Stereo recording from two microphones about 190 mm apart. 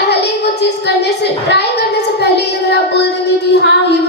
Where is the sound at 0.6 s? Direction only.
60° left (ahead or behind).